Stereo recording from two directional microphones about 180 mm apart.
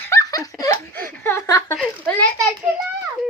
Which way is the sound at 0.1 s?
20° left (ahead or behind).